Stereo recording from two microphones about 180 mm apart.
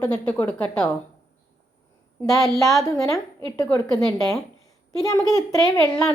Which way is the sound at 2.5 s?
Centre (ahead or behind).